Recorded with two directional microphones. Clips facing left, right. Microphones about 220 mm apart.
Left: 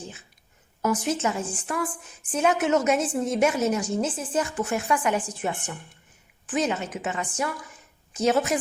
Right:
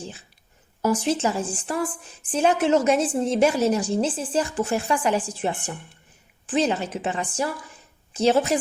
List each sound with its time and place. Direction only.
0.8 s a woman's voice: 30° right (ahead or behind)